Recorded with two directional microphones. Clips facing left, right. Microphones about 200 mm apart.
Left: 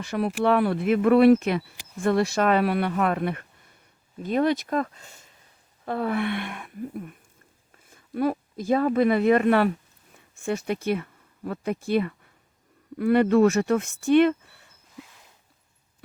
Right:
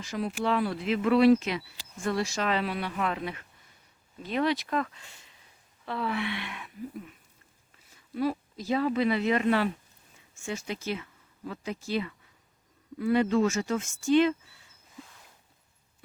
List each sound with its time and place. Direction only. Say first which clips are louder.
0.0 s a woman's voice: left 6 dB; 60° left (ahead or behind)